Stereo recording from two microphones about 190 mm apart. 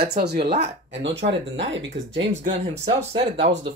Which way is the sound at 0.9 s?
70° right (ahead or behind).